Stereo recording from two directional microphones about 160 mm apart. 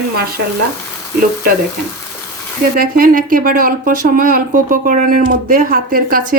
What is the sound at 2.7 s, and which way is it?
Speech, 65° right (ahead or behind).